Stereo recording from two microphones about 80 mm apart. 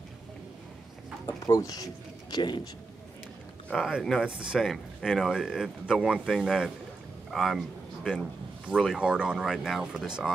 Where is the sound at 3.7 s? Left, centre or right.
Centre.